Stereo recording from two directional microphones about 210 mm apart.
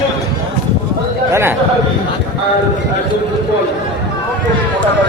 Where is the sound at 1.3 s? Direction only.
10° right (ahead or behind).